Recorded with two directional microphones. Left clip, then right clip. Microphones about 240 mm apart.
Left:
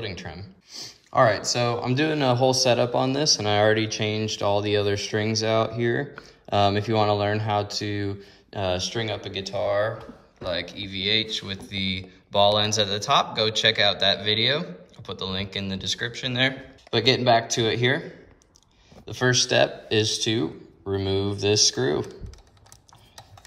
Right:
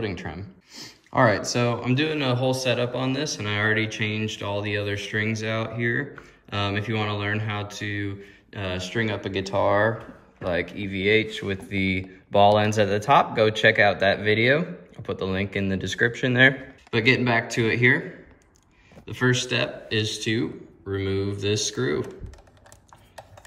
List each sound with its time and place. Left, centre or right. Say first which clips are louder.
0.0 s speech: right 3 dB; centre
16.9 s speech: left 1 dB; centre
19.0 s speech: left 2 dB; centre